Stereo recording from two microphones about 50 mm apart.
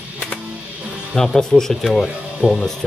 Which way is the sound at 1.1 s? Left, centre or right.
Centre.